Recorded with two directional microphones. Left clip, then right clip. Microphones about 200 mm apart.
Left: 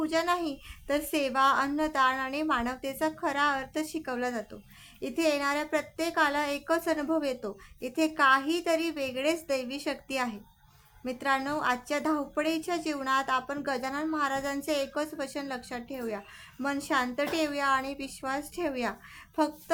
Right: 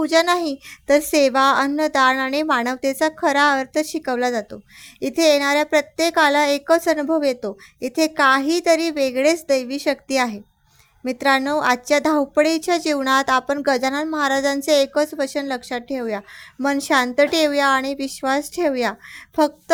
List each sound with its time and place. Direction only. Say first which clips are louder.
0.0 s a woman's voice: right 11 dB; 40° right (ahead or behind)